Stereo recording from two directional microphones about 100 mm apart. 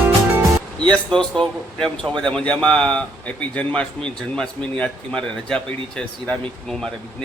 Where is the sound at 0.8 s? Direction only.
10° left (ahead or behind).